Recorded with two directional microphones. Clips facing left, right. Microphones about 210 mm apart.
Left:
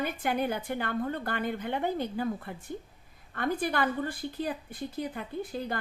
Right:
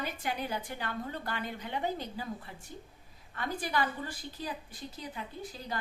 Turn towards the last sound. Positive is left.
turn(degrees=55)  # may be behind; listen again after turning